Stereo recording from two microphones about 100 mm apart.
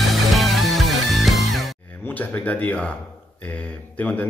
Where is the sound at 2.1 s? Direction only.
15° left (ahead or behind).